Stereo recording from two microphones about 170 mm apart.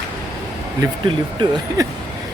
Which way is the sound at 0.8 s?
25° right (ahead or behind).